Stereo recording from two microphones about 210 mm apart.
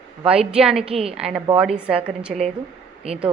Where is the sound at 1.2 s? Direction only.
5° right (ahead or behind).